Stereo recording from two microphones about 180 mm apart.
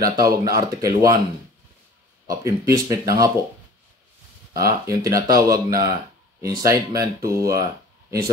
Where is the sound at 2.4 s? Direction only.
20° right (ahead or behind).